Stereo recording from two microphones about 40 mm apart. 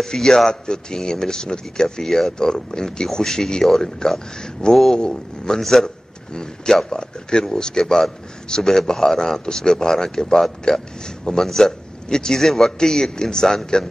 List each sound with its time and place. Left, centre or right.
0.0 s speech: centre
2.0 s speech: centre
2.3 s speech: centre
6.3 s speech: centre